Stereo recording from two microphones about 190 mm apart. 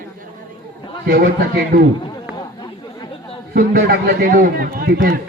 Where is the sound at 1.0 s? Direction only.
50° right (ahead or behind).